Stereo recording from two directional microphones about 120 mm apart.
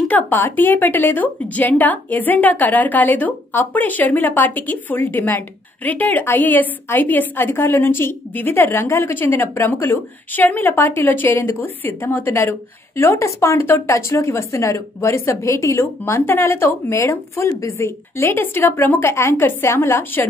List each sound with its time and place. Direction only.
0.1 s a woman's voice: 15° left (ahead or behind)